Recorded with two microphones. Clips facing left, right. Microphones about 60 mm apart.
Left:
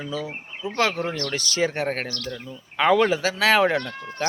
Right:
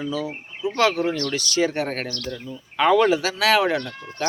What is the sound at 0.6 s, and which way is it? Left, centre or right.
Speech, centre.